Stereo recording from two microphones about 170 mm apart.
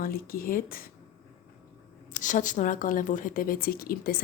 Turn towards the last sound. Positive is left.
turn(degrees=60)  # may be behind; listen again after turning